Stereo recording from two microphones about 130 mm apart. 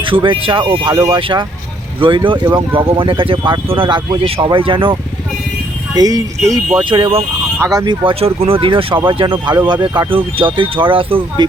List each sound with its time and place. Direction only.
0.0 s speech: 40° right (ahead or behind)
5.9 s speech: 30° right (ahead or behind)
6.8 s speech: 40° right (ahead or behind)
7.6 s speech: 30° right (ahead or behind)
8.0 s speech: 50° right (ahead or behind)